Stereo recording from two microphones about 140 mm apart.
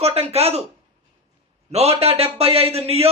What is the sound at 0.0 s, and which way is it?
Speech, 45° right (ahead or behind).